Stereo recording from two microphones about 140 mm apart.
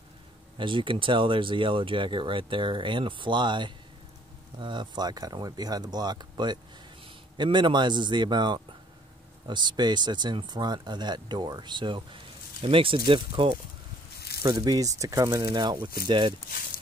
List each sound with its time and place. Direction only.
0.6 s speech: 35° right (ahead or behind)
15.3 s speech: 35° right (ahead or behind)